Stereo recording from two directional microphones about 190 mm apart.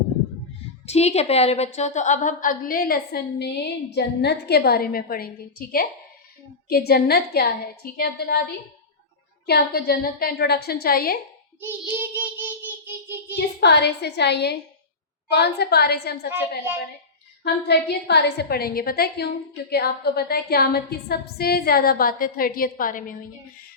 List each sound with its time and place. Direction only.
0.9 s a woman's voice: 35° left (ahead or behind); by 8.4 s 55° left (ahead or behind)
9.5 s a woman's voice: 55° left (ahead or behind)
11.6 s child singing: 10° right (ahead or behind)
13.3 s a woman's voice: 60° left (ahead or behind)
17.4 s a woman's voice: 60° left (ahead or behind)